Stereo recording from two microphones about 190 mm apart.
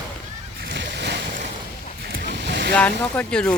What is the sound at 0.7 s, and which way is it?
Splash, 65° right (ahead or behind).